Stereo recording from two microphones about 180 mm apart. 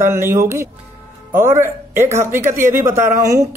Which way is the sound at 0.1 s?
15° right (ahead or behind).